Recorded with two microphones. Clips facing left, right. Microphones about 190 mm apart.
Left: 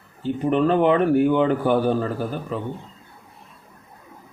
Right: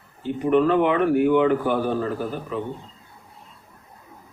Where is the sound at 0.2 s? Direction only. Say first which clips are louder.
Right 1 dB; 35° left (ahead or behind).